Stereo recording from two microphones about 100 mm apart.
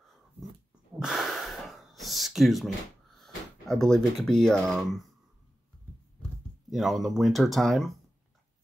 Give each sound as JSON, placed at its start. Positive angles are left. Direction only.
{"t": 1.0, "sound": "gasp", "side_deg": 0}
{"t": 3.2, "sound": "speech", "side_deg": 5}
{"t": 6.7, "sound": "speech", "side_deg": 0}